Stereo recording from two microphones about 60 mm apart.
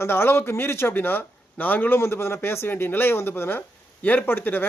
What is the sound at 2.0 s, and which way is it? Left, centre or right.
A man's voice, left.